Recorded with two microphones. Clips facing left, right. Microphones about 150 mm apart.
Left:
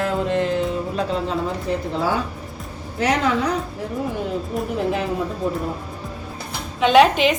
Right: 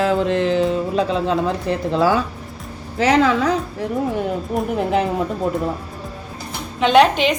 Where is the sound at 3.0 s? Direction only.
90° right.